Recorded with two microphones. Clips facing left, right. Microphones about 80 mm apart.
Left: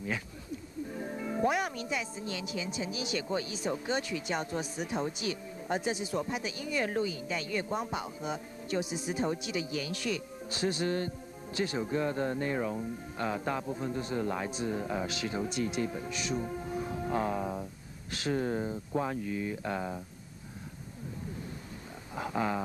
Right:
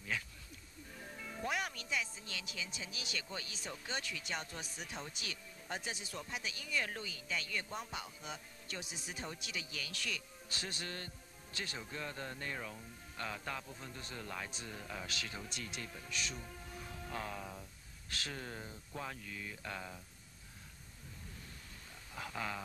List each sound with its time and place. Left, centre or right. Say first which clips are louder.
0.9 s music: left 12 dB; left
1.5 s speech: left 7 dB; centre
16.3 s music: left 15 dB; left
18.1 s speech: left 13 dB; left
22.1 s speech: left 10 dB; left